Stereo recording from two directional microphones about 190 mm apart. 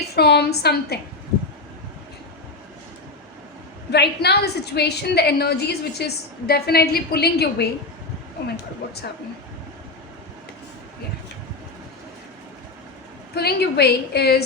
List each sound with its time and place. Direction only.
0.2 s a woman's voice: 60° left (ahead or behind)
3.9 s a woman's voice: 60° left (ahead or behind)
13.3 s a woman's voice: 60° left (ahead or behind)